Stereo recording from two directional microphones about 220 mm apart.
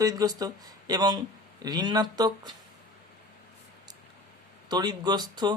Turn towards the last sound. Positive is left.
turn(degrees=-20)  # may be behind; listen again after turning